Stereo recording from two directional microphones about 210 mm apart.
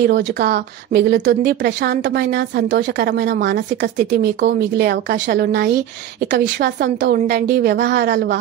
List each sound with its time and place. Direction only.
0.0 s a woman's voice: 50° right (ahead or behind)